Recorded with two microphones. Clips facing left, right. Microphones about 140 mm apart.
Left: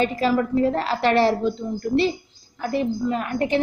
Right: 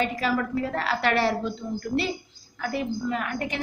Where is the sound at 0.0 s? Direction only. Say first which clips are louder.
Left 5 dB; 30° left (ahead or behind).